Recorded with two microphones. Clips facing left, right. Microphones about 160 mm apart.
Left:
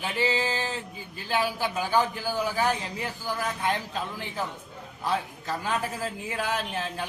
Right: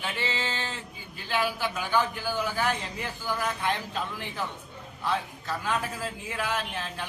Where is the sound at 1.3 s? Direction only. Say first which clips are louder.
Left 1 dB; 40° left (ahead or behind).